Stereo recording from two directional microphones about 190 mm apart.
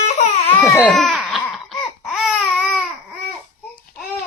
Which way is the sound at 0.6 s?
15° left (ahead or behind).